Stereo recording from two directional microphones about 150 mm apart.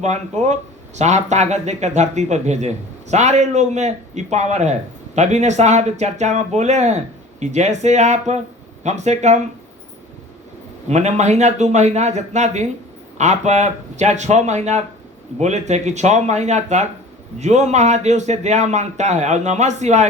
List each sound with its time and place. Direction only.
0.0 s speech: 50° right (ahead or behind)
10.8 s speech: 50° right (ahead or behind)